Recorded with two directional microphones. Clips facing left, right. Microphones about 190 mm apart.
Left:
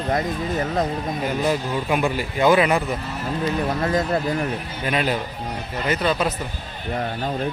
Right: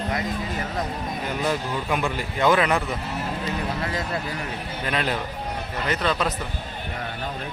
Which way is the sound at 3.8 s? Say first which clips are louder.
Left 7 dB; 45° left (ahead or behind).